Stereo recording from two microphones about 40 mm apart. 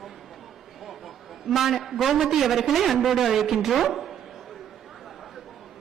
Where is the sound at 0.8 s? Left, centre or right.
Centre.